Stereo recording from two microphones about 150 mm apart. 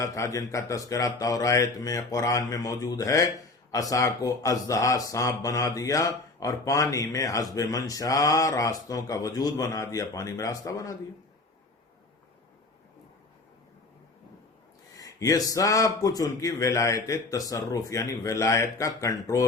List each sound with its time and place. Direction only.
0.0 s speech: 20° left (ahead or behind)
14.9 s speech: 25° left (ahead or behind)